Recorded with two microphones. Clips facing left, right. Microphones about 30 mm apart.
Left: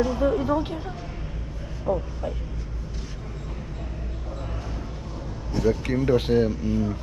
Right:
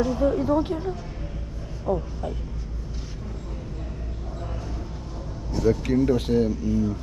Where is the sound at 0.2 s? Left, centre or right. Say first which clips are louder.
Even; left.